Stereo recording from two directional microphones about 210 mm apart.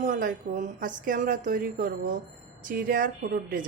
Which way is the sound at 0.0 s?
40° right (ahead or behind).